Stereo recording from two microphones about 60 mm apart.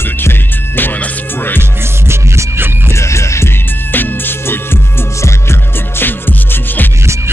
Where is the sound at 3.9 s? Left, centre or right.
Left.